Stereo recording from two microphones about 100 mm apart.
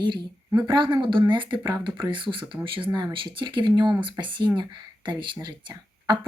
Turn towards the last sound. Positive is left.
turn(degrees=-50)  # may be behind; listen again after turning